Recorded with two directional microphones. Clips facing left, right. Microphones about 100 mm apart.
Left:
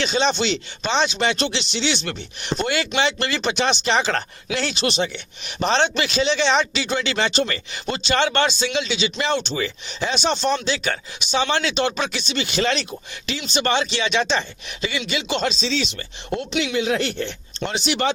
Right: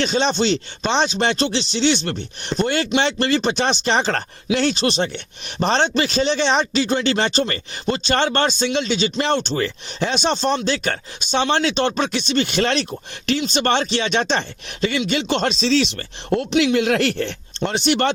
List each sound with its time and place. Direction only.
0.0 s speech: 45° right (ahead or behind)